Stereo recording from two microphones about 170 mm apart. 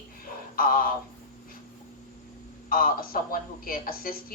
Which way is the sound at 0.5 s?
55° left (ahead or behind).